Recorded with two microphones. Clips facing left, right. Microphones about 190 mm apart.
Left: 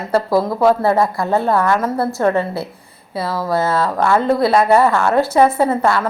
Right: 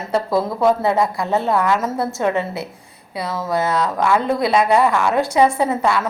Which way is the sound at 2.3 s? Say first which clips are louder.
Left 3 dB; 20° right (ahead or behind).